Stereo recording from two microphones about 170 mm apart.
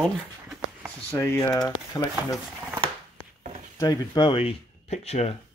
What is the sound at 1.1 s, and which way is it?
Speech, 15° left (ahead or behind).